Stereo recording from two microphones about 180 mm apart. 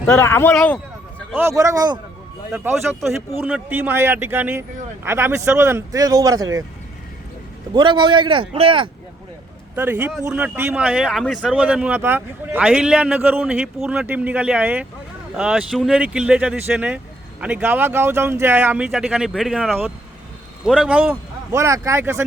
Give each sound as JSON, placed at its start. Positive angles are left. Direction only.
{"t": 0.1, "sound": "speech", "side_deg": 15}
{"t": 1.4, "sound": "speech", "side_deg": -15}
{"t": 3.3, "sound": "speech", "side_deg": -10}
{"t": 7.7, "sound": "speech", "side_deg": -25}
{"t": 9.7, "sound": "speech", "side_deg": -10}